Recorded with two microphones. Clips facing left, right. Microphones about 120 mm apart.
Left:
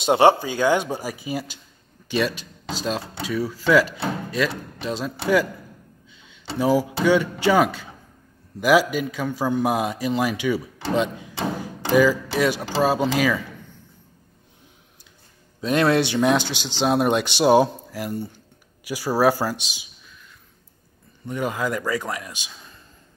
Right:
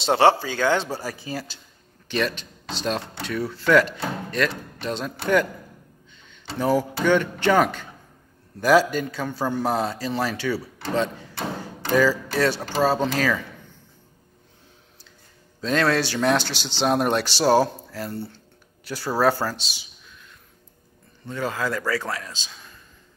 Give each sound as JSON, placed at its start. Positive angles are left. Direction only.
{"t": 0.1, "sound": "speech", "side_deg": 15}
{"t": 6.2, "sound": "a sound", "side_deg": 10}
{"t": 7.1, "sound": "speech", "side_deg": 10}
{"t": 15.6, "sound": "speech", "side_deg": 20}
{"t": 16.8, "sound": "speech", "side_deg": 5}
{"t": 17.4, "sound": "speech", "side_deg": 20}
{"t": 21.3, "sound": "speech", "side_deg": 15}